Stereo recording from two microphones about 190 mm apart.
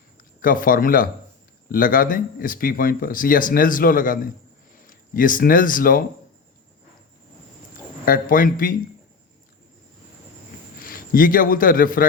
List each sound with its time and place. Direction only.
0.3 s speech: 45° left (ahead or behind)
8.0 s speech: 45° left (ahead or behind)
10.8 s a man's voice: 50° left (ahead or behind)